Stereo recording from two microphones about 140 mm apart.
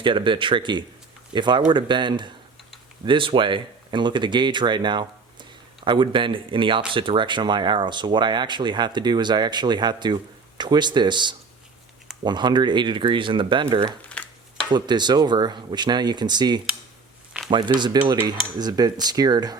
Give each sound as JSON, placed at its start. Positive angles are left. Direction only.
{"t": 0.0, "sound": "speech", "side_deg": -35}
{"t": 14.1, "sound": "a sound", "side_deg": 10}
{"t": 14.7, "sound": "speech", "side_deg": -30}
{"t": 18.3, "sound": "cutlery", "side_deg": -30}